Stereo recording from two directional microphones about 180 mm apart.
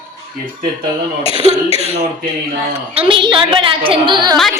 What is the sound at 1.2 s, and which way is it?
Speech, 30° left (ahead or behind).